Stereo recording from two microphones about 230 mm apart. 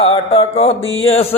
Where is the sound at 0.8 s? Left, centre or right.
Left.